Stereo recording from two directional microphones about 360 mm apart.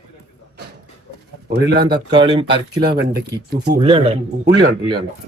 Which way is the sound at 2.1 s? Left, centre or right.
Centre.